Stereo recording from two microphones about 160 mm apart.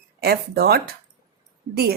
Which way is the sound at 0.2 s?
75° right (ahead or behind).